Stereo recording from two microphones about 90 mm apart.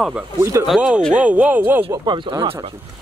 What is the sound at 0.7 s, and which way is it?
Speech, 15° right (ahead or behind).